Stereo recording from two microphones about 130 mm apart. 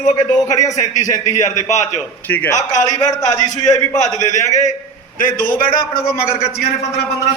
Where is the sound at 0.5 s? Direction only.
25° left (ahead or behind).